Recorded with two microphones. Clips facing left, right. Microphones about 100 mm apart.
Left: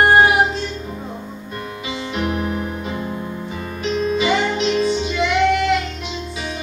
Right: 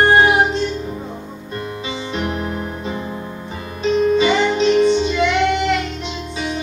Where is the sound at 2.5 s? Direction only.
25° right (ahead or behind).